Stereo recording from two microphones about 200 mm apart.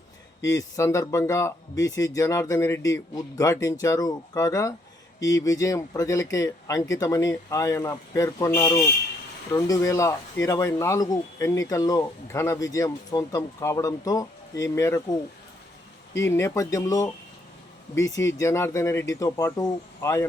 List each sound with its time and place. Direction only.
0.5 s speech: 15° left (ahead or behind)